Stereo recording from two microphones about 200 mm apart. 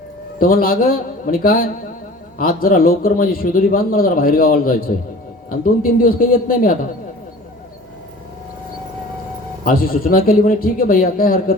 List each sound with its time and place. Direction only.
0.3 s speech: 45° left (ahead or behind)
9.6 s speech: 45° left (ahead or behind)